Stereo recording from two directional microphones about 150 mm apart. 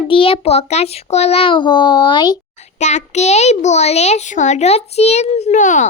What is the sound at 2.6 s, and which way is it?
A child's voice, 50° left (ahead or behind).